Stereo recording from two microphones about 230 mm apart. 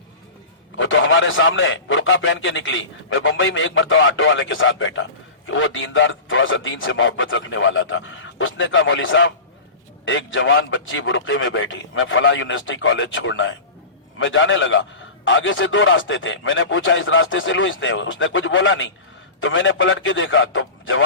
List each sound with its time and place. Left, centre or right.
0.8 s a man's voice: left